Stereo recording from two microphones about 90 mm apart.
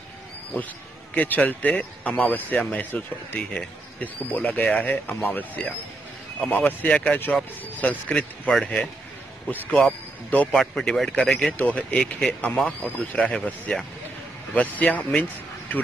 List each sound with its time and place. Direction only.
1.1 s speech: 20° left (ahead or behind)